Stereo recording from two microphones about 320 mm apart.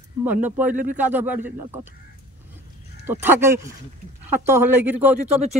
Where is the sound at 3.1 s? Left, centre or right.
Centre.